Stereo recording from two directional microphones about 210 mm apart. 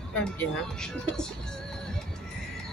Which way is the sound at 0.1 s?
5° left (ahead or behind).